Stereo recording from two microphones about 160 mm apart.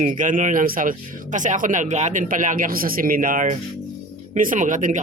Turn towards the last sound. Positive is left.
turn(degrees=-55)  # may be behind; listen again after turning